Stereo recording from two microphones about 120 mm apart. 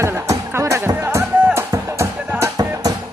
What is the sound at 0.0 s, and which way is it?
Music, 25° right (ahead or behind).